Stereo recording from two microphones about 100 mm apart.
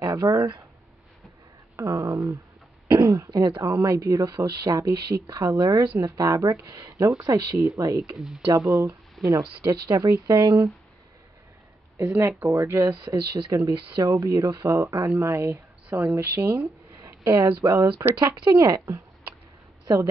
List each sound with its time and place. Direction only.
0.1 s speech: 35° right (ahead or behind)
1.8 s speech: 30° right (ahead or behind)
12.0 s speech: 25° right (ahead or behind)
13.0 s speech: 45° right (ahead or behind); by 16.6 s 20° right (ahead or behind)
17.0 s speech: 35° right (ahead or behind)